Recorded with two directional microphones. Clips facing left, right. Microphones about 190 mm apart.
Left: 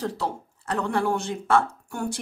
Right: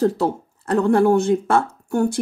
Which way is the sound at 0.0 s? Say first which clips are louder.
Right 10 dB; 45° right (ahead or behind).